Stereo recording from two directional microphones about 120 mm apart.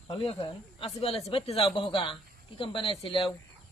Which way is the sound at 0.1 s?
50° left (ahead or behind).